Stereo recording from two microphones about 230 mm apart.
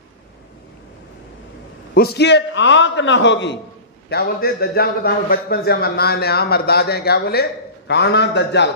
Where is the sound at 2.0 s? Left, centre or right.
Left.